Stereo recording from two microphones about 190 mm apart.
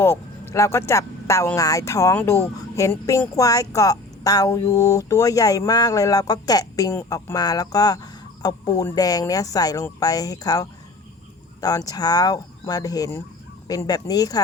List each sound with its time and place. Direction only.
0.0 s a woman's voice: 15° left (ahead or behind)